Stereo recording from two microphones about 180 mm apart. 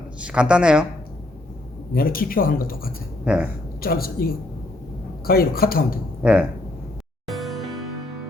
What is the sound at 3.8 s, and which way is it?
Speech, 55° left (ahead or behind).